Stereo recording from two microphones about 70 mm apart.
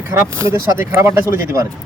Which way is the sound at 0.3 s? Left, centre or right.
Right.